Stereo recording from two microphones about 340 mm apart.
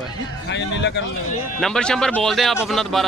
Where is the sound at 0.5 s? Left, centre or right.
Left.